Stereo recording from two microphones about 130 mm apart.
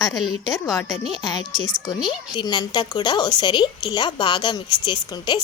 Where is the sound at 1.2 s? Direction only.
30° left (ahead or behind).